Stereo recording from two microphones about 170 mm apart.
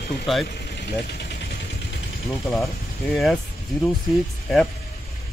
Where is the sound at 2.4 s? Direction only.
Centre (ahead or behind).